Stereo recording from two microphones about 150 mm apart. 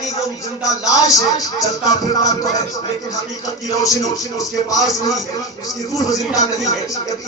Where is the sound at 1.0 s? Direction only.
25° left (ahead or behind).